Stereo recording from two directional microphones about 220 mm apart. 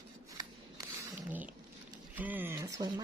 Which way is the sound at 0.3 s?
15° right (ahead or behind).